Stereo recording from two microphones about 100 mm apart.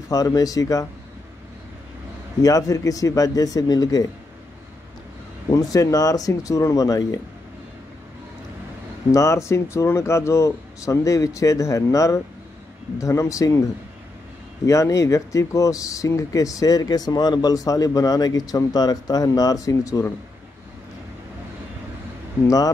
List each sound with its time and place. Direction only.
0.1 s speech: 40° left (ahead or behind)
2.4 s speech: 35° left (ahead or behind)
5.5 s speech: 35° left (ahead or behind)
9.1 s speech: 30° left (ahead or behind)
14.7 s speech: 35° left (ahead or behind)